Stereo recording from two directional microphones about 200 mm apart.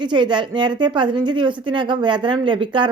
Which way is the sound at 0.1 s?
20° right (ahead or behind).